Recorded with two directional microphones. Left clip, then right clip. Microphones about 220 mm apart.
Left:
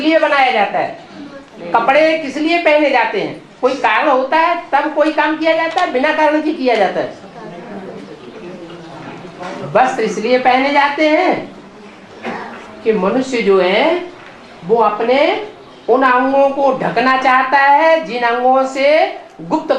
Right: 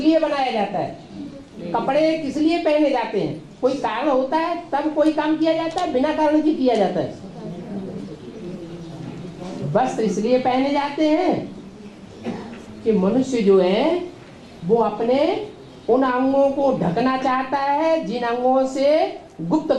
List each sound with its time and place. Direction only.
0.0 s a woman's voice: 15° left (ahead or behind)
9.4 s a sound: 15° left (ahead or behind)
10.2 s a woman's voice: 15° left (ahead or behind)
12.8 s a woman's voice: 20° left (ahead or behind)
16.2 s a woman's voice: 30° left (ahead or behind)